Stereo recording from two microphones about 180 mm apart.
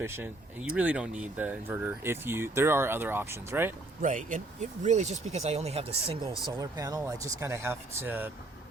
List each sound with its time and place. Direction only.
0.0 s speech: 10° right (ahead or behind)
4.0 s speech: 45° right (ahead or behind)
6.4 s speech: 20° right (ahead or behind)